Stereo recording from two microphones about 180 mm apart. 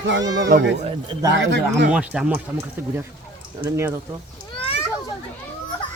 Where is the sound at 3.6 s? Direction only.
25° right (ahead or behind).